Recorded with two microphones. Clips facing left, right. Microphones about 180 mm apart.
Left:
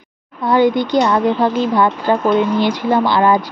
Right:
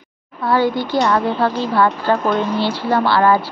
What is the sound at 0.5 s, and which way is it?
Speech, 20° left (ahead or behind).